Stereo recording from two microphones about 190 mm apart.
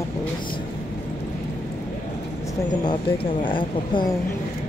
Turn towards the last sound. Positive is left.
turn(degrees=25)  # may be behind; listen again after turning